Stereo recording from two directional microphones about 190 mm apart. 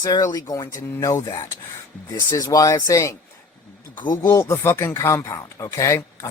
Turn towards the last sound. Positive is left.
turn(degrees=15)  # may be behind; listen again after turning